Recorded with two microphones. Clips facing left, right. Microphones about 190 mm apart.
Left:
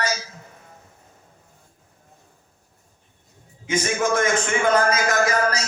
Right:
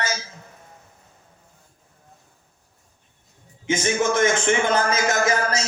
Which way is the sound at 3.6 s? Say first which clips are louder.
Right 1 dB; 25° right (ahead or behind).